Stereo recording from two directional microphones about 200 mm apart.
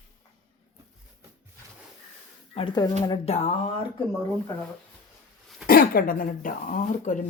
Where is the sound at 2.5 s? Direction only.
30° left (ahead or behind).